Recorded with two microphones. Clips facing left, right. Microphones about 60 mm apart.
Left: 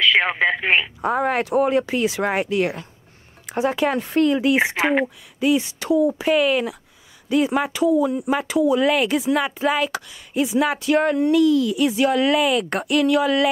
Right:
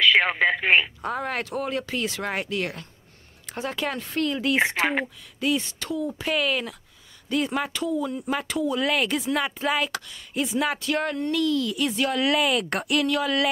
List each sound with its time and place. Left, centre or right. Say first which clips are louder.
0.1 s speech: left 2 dB; centre